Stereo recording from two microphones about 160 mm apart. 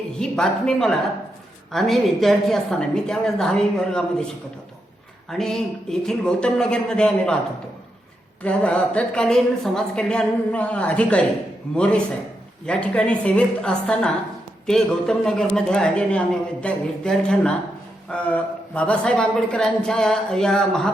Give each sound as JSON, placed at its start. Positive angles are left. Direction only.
{"t": 0.2, "sound": "a woman's voice", "side_deg": 5}
{"t": 5.3, "sound": "a woman's voice", "side_deg": 5}
{"t": 8.4, "sound": "a woman's voice", "side_deg": 10}